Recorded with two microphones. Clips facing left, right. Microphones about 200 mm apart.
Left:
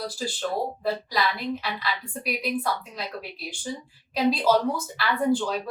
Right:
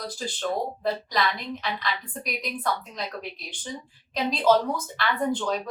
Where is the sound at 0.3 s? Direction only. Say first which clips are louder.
Right 1 dB; 5° left (ahead or behind).